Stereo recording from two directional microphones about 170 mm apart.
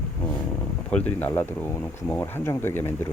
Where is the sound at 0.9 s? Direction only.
10° left (ahead or behind).